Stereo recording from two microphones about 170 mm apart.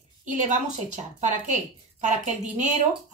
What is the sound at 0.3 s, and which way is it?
Speech, 45° right (ahead or behind).